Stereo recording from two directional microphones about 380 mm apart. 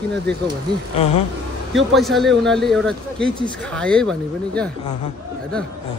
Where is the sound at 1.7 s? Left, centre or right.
Centre.